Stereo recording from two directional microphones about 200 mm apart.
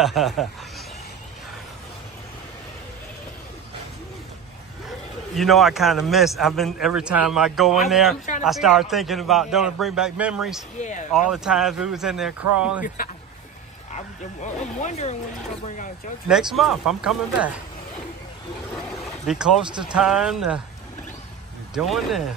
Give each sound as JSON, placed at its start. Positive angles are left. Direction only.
{"t": 0.0, "sound": "a man's voice", "side_deg": 0}
{"t": 4.8, "sound": "a man's voice", "side_deg": 0}
{"t": 10.8, "sound": "speech", "side_deg": 40}
{"t": 11.2, "sound": "a man's voice", "side_deg": -5}
{"t": 12.8, "sound": "speech", "side_deg": 45}
{"t": 16.3, "sound": "a man's voice", "side_deg": 0}
{"t": 19.2, "sound": "a man's voice", "side_deg": 0}
{"t": 21.7, "sound": "a man's voice", "side_deg": 0}